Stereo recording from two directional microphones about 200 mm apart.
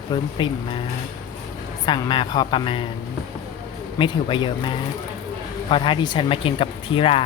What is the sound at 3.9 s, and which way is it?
Speech, 25° left (ahead or behind).